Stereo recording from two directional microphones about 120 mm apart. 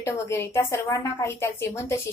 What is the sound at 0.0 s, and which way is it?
A woman's voice, 20° left (ahead or behind).